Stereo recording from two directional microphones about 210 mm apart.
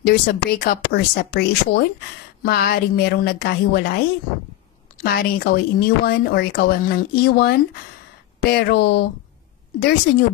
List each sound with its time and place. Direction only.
0.0 s a woman's voice: 45° left (ahead or behind)